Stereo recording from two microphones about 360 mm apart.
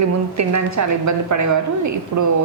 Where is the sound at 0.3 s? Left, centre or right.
Right.